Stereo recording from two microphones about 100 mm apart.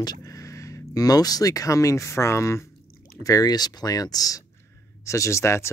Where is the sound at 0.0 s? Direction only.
40° left (ahead or behind).